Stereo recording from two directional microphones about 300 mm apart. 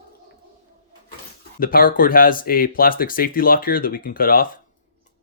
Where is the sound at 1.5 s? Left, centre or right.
Left.